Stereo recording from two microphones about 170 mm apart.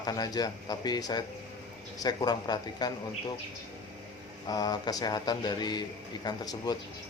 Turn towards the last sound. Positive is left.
turn(degrees=25)  # may be behind; listen again after turning